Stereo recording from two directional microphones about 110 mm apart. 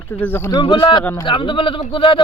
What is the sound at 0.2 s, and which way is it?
Speech, 20° left (ahead or behind).